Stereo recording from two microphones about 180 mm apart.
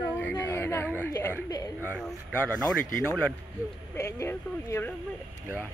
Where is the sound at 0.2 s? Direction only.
10° left (ahead or behind).